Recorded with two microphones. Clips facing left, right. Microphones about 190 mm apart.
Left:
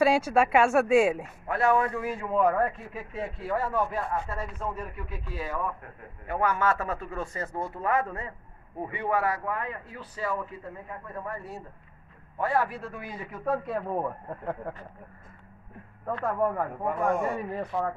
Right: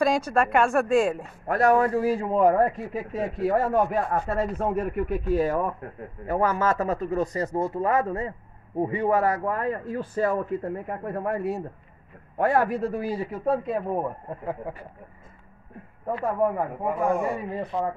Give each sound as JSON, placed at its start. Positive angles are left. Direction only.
{"t": 0.0, "sound": "speech", "side_deg": 10}
{"t": 1.5, "sound": "a man's voice", "side_deg": -40}
{"t": 12.4, "sound": "a man's voice", "side_deg": -50}
{"t": 16.1, "sound": "speech", "side_deg": -10}
{"t": 17.6, "sound": "a man's voice", "side_deg": -20}